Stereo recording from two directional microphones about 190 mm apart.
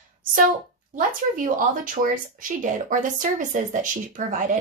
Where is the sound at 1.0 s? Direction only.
45° right (ahead or behind).